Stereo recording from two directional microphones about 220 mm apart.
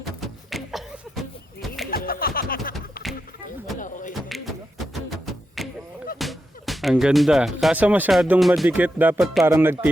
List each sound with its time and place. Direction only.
0.0 s a sound: centre (ahead or behind)
1.9 s music: 45° left (ahead or behind)
2.7 s music: centre (ahead or behind)
3.8 s a sound: 35° left (ahead or behind)
5.0 s music: centre (ahead or behind)
6.1 s speech: centre (ahead or behind)